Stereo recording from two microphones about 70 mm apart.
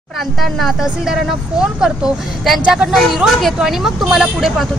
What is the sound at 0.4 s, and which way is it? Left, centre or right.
Speech, centre.